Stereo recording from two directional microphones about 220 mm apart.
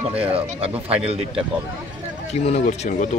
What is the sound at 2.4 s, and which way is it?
Speech, 30° left (ahead or behind).